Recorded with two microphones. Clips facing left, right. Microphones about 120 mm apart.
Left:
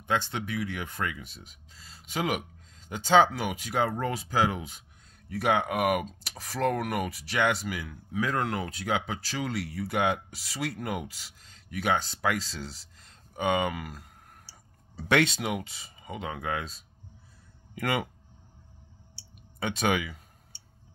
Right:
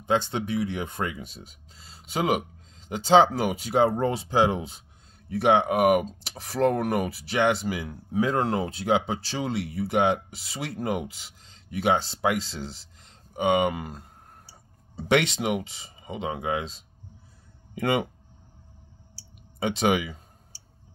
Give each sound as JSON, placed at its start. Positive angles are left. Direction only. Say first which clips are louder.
{"t": 0.0, "sound": "speech", "louder": "right 5 dB", "side_deg": -25}
{"t": 19.6, "sound": "speech", "louder": "right 4 dB", "side_deg": -20}